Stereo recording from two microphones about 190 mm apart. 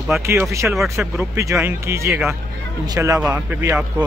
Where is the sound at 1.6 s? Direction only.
15° right (ahead or behind).